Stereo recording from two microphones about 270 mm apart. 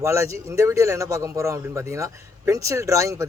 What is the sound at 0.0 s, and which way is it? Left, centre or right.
A man's voice, centre.